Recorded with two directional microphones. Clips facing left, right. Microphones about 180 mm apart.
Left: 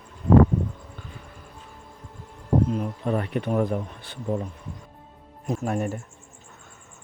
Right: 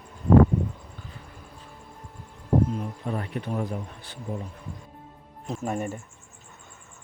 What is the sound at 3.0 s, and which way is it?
Speech, 80° left.